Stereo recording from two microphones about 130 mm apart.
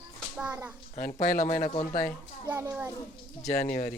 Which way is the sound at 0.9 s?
90° left.